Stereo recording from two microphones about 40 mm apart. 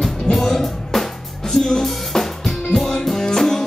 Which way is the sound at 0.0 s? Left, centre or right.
Centre.